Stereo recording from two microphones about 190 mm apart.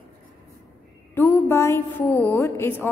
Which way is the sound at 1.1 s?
10° left (ahead or behind).